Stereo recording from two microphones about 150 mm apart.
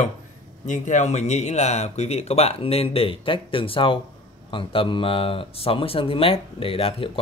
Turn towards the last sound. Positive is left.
turn(degrees=40)  # may be behind; listen again after turning